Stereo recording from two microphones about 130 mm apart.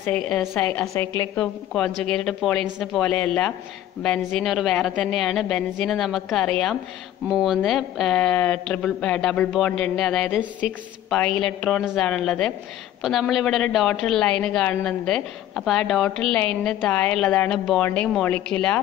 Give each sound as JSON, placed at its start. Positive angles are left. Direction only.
{"t": 0.0, "sound": "a woman's voice", "side_deg": 10}
{"t": 0.9, "sound": "a woman's voice", "side_deg": 20}
{"t": 1.3, "sound": "a woman's voice", "side_deg": 5}